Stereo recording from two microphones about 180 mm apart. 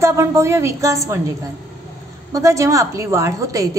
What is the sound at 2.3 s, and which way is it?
A woman's voice, 15° right (ahead or behind).